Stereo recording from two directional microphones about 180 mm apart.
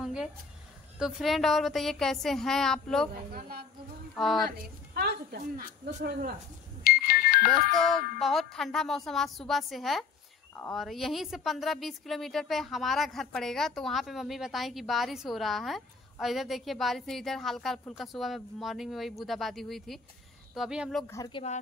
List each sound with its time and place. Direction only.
0.0 s a sound: centre (ahead or behind)
0.9 s a woman's voice: 5° right (ahead or behind)
3.3 s a woman's voice: 55° right (ahead or behind)
4.1 s a sound: centre (ahead or behind)
4.5 s a woman's voice: 60° right (ahead or behind)
6.8 s music: 55° left (ahead or behind)
7.7 s a woman's voice: centre (ahead or behind)
21.1 s speech: 20° left (ahead or behind)